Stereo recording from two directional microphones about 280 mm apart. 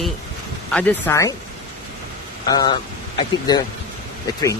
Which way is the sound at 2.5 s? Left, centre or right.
Centre.